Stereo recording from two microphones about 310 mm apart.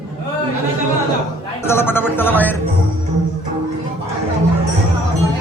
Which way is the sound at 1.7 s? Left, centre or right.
Centre.